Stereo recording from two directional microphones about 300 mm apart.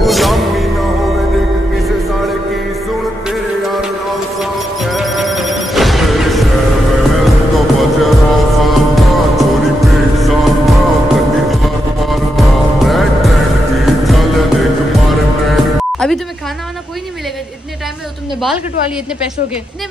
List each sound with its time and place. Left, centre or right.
0.0 s music: centre
3.3 s music: centre
7.5 s music: centre